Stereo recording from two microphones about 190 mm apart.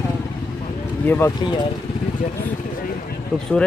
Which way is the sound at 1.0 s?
10° left (ahead or behind).